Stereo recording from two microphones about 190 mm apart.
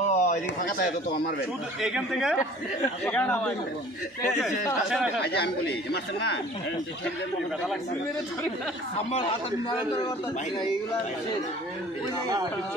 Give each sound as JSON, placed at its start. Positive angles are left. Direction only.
{"t": 0.1, "sound": "a sound", "side_deg": 40}
{"t": 1.8, "sound": "a man's voice", "side_deg": -5}
{"t": 4.8, "sound": "speech", "side_deg": -5}
{"t": 5.2, "sound": "speech", "side_deg": 60}
{"t": 8.9, "sound": "a man's voice", "side_deg": 25}